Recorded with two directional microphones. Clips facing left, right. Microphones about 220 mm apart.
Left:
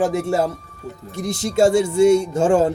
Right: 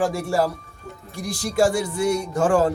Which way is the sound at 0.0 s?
20° left (ahead or behind).